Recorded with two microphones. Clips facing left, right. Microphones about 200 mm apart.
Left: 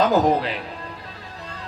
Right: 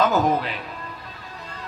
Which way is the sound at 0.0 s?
30° left (ahead or behind).